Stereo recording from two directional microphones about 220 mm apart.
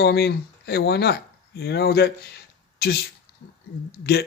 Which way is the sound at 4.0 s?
45° left (ahead or behind).